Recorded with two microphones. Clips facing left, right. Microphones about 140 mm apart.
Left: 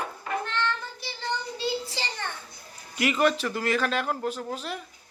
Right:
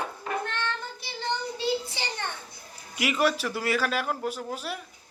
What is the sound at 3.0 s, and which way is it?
Speech, 10° right (ahead or behind).